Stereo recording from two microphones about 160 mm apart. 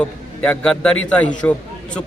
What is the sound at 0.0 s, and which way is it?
A man's voice, 5° left (ahead or behind).